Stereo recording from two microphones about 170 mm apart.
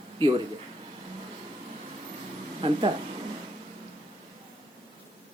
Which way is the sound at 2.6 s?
30° right (ahead or behind).